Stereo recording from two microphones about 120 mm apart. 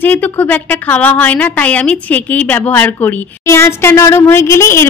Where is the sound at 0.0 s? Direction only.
15° left (ahead or behind).